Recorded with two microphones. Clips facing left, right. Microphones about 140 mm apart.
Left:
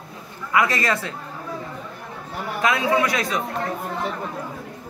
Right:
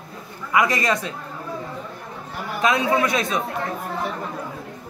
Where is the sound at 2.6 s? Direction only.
20° right (ahead or behind).